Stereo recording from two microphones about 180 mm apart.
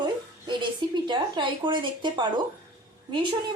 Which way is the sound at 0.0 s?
25° right (ahead or behind).